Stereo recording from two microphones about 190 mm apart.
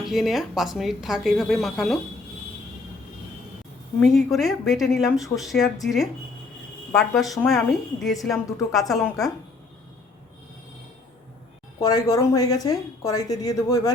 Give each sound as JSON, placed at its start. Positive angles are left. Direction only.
{"t": 0.0, "sound": "a woman's voice", "side_deg": 0}
{"t": 4.0, "sound": "a woman's voice", "side_deg": 0}
{"t": 11.8, "sound": "speech", "side_deg": 20}